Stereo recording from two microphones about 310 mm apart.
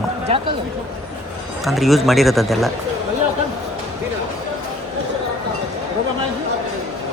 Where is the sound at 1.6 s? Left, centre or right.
Centre.